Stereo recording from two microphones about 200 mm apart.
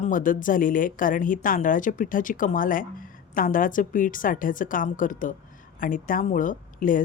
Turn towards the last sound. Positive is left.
turn(degrees=40)  # may be behind; listen again after turning